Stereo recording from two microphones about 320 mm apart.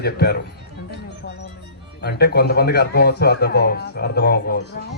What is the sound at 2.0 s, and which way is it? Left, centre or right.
Speech, left.